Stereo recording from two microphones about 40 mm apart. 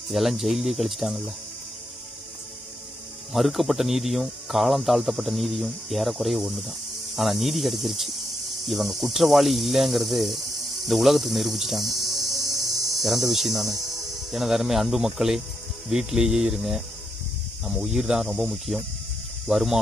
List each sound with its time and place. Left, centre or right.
0.1 s speech: centre
3.3 s speech: centre
17.9 s speech: centre
18.7 s speech: right
19.4 s speech: centre